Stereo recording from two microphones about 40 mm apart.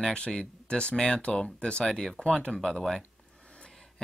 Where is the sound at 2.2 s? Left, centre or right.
Left.